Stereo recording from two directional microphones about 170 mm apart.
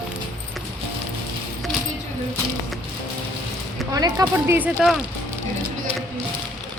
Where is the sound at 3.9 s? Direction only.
20° right (ahead or behind).